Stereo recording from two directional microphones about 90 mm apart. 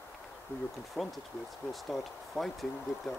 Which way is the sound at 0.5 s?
25° left (ahead or behind).